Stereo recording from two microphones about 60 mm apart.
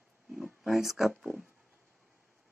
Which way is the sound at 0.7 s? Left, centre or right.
Centre.